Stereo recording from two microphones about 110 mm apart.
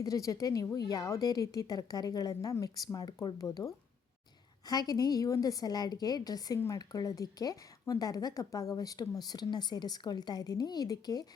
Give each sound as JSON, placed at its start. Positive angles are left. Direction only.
{"t": 0.0, "sound": "speech", "side_deg": 30}